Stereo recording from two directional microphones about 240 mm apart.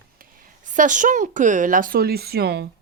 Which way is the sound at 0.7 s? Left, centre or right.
Right.